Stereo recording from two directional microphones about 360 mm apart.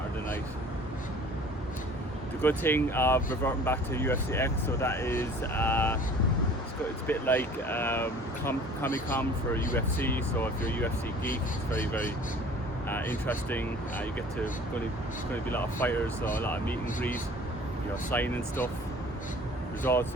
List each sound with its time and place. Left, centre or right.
2.4 s speech: centre
7.1 s speech: centre
12.9 s speech: centre
15.4 s speech: centre
19.8 s speech: centre